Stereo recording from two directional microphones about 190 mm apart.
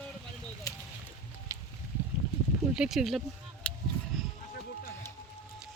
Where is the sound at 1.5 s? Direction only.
15° right (ahead or behind).